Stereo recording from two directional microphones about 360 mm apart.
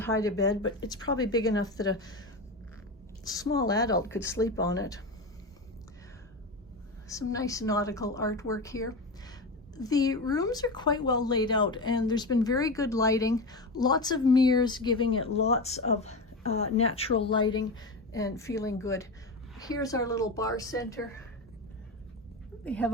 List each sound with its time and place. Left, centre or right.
0.0 s a woman's voice: centre
3.2 s a woman's voice: centre
7.1 s a woman's voice: centre
22.6 s speech: centre